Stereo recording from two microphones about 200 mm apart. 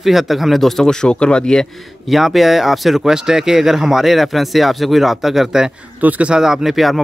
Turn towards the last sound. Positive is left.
turn(degrees=0)  # may be behind; listen again after turning